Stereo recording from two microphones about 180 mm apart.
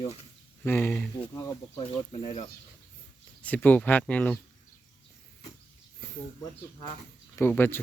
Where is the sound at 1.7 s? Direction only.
30° left (ahead or behind).